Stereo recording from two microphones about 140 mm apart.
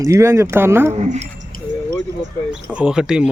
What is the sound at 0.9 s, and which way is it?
Speech, 50° right (ahead or behind).